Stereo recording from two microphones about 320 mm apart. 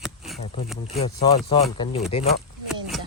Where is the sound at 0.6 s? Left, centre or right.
Centre.